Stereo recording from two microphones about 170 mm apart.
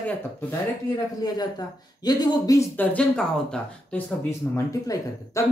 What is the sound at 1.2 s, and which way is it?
A woman's voice, 25° left (ahead or behind).